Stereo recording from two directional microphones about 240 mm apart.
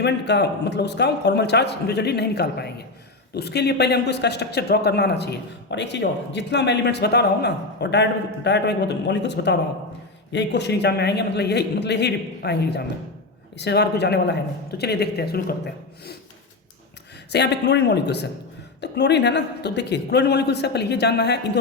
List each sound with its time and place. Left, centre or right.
0.0 s a man's voice: left
17.3 s a man's voice: left